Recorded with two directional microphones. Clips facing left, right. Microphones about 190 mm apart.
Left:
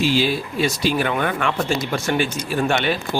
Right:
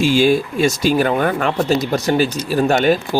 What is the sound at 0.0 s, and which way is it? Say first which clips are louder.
Speech: right 6 dB; 50° right (ahead or behind).